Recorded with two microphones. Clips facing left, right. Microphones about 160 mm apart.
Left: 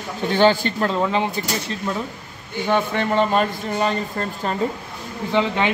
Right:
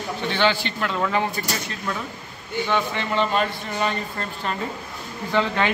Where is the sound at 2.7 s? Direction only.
45° left (ahead or behind).